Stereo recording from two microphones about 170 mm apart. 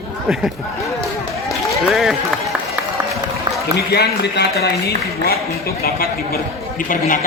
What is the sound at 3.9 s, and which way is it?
Speech, 70° left (ahead or behind).